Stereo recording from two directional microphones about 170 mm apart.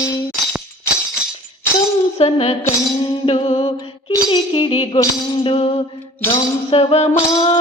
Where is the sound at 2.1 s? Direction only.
40° left (ahead or behind).